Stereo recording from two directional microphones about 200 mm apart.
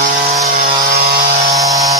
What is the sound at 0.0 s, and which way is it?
Vehicle, 40° right (ahead or behind).